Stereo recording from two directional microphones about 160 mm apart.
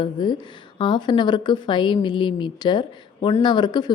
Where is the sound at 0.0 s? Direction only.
30° left (ahead or behind).